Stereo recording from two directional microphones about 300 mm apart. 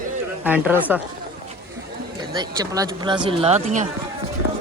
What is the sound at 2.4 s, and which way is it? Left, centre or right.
Speech, centre.